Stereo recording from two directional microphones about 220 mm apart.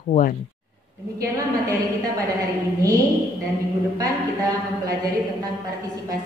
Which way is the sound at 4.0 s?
15° right (ahead or behind).